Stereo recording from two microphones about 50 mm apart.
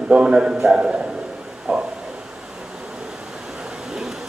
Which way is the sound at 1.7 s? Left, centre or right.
Centre.